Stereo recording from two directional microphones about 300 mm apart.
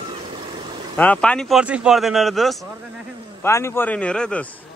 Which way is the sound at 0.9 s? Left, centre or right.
Centre.